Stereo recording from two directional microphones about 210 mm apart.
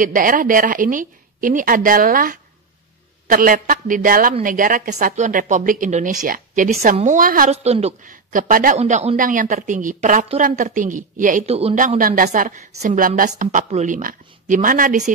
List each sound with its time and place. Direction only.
0.0 s a woman's voice: 40° right (ahead or behind)